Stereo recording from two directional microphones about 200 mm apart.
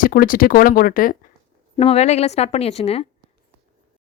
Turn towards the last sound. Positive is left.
turn(degrees=30)  # may be behind; listen again after turning